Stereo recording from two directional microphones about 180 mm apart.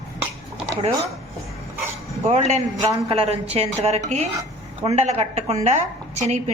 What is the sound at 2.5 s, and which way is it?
A woman's voice, 40° right (ahead or behind).